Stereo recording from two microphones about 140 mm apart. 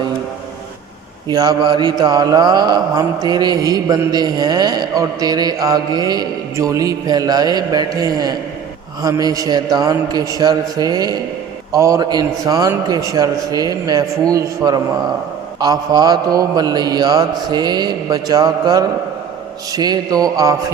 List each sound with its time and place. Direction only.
1.3 s mantra: 30° right (ahead or behind)